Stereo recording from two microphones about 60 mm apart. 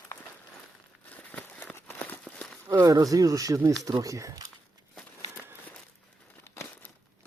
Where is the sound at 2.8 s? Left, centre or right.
Right.